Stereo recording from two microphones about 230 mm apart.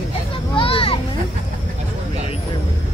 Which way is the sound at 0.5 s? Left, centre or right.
Left.